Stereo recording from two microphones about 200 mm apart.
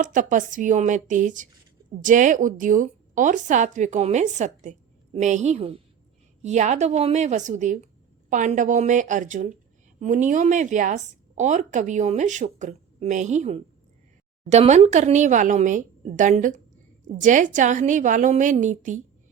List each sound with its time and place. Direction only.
0.0 s a woman's voice: 40° right (ahead or behind)